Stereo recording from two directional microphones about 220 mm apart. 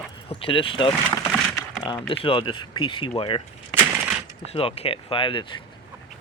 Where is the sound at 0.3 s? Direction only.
25° left (ahead or behind).